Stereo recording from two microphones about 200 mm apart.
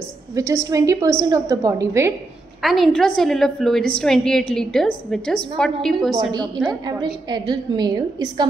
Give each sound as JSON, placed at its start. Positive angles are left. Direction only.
{"t": 0.4, "sound": "a woman's voice", "side_deg": -15}
{"t": 2.6, "sound": "a woman's voice", "side_deg": 0}
{"t": 6.3, "sound": "a woman's voice", "side_deg": -20}